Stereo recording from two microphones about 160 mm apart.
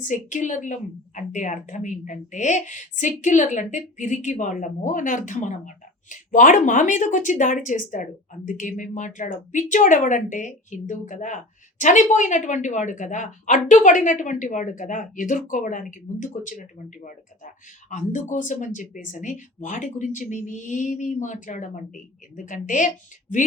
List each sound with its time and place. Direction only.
0.0 s speech: 55° left (ahead or behind)